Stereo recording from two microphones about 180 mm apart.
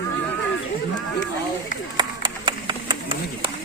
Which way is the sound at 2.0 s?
25° right (ahead or behind).